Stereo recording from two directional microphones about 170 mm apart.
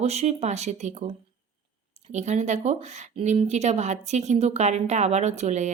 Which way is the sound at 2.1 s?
45° right (ahead or behind).